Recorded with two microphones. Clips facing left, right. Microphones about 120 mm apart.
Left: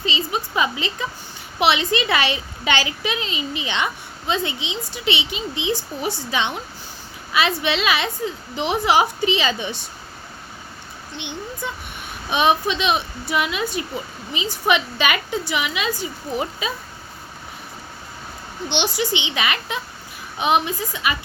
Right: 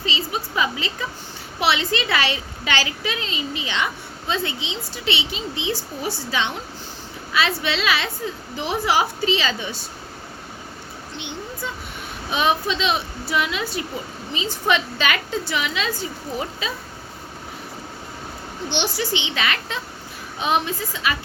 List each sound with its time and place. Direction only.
0.0 s a woman's voice: 20° left (ahead or behind)
7.6 s a woman's voice: 20° left (ahead or behind)
11.2 s a woman's voice: 20° left (ahead or behind)
18.9 s a woman's voice: 15° left (ahead or behind)